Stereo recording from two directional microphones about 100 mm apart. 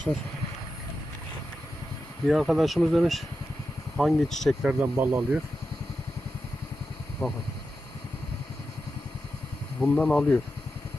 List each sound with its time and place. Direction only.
2.2 s speech: centre (ahead or behind)
4.6 s speech: 15° right (ahead or behind)
7.2 s speech: 30° left (ahead or behind)
9.8 s speech: 15° left (ahead or behind)